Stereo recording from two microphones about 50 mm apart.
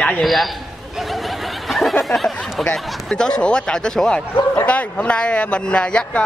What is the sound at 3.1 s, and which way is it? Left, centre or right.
A man's voice, centre.